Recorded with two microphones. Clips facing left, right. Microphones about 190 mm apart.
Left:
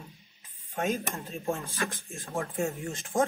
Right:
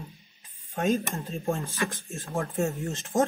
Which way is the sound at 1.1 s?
35° right (ahead or behind).